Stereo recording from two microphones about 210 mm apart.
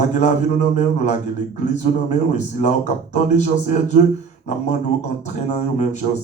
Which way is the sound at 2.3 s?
35° left (ahead or behind).